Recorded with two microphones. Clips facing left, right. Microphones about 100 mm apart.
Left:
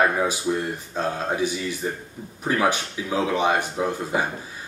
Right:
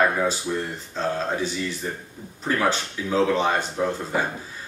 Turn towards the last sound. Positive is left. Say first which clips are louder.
# even
turn(degrees=15)  # may be behind; listen again after turning